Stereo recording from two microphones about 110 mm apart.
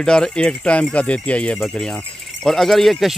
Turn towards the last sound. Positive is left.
turn(degrees=0)  # may be behind; listen again after turning